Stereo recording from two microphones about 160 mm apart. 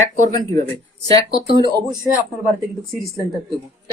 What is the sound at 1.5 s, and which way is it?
Speech, 30° right (ahead or behind).